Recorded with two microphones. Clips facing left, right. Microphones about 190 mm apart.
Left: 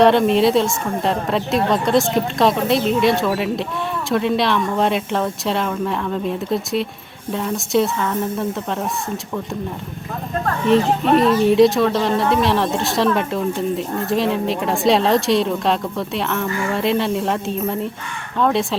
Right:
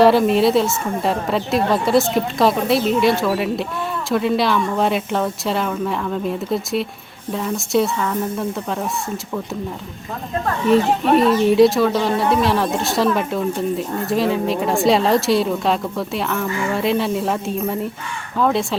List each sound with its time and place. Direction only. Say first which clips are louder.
0.0 s speech: even; 5° right (ahead or behind)
10.7 s speech: even; centre (ahead or behind)